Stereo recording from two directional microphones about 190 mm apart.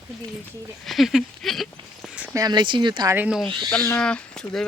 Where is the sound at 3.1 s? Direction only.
5° right (ahead or behind).